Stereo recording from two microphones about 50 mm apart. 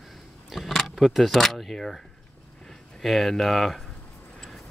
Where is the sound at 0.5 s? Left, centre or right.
Centre.